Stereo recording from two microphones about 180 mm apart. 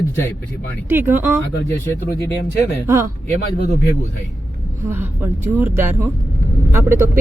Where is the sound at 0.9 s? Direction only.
10° right (ahead or behind).